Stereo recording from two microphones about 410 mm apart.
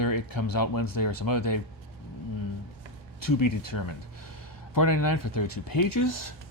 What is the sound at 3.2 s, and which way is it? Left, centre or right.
Speech, left.